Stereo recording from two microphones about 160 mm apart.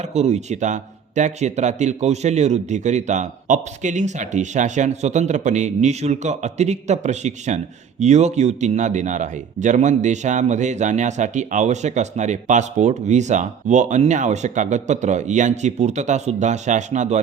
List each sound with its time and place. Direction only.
0.0 s speech: 45° right (ahead or behind)